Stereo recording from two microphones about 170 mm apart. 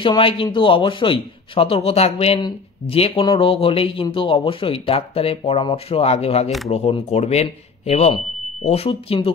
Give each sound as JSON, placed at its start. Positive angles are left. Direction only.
{"t": 0.0, "sound": "a man's voice", "side_deg": 30}